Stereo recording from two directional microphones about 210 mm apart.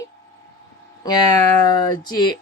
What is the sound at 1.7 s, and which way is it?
Speech, 20° left (ahead or behind).